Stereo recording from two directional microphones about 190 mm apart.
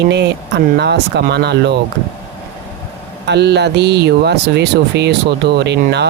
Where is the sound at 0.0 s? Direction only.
65° right (ahead or behind).